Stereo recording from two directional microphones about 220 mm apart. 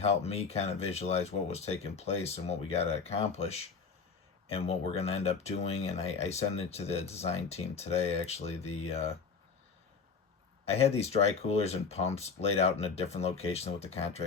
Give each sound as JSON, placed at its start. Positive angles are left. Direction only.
{"t": 0.0, "sound": "speech", "side_deg": 30}
{"t": 10.7, "sound": "speech", "side_deg": 30}